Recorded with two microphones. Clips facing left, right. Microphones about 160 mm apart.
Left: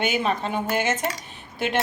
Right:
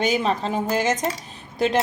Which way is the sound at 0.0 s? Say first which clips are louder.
Right 2 dB; 35° right (ahead or behind).